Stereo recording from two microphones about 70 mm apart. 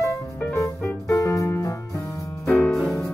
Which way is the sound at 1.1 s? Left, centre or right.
Left.